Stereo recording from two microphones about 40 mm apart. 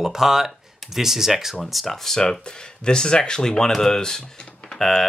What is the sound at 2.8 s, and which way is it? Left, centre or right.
Speech, centre.